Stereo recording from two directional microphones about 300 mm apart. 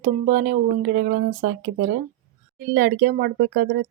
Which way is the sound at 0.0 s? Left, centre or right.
Right.